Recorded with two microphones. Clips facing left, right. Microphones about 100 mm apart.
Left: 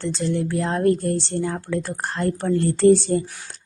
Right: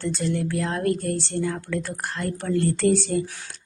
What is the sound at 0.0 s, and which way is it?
A woman's voice, 25° left (ahead or behind).